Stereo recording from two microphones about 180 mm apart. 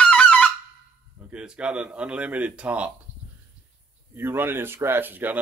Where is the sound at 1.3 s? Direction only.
5° right (ahead or behind).